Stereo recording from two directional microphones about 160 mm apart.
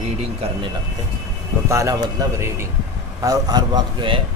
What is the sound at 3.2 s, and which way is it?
Speech, 25° right (ahead or behind).